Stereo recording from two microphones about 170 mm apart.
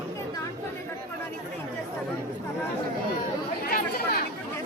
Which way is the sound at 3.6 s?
65° left (ahead or behind).